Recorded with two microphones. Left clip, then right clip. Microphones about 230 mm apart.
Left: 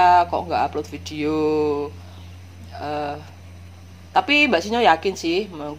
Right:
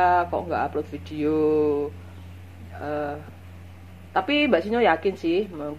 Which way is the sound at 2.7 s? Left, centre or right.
Left.